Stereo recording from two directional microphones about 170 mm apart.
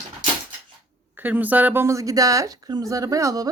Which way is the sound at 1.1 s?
10° right (ahead or behind).